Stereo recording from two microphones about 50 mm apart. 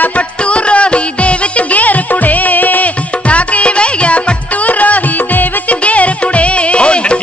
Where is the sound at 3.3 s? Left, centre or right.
Left.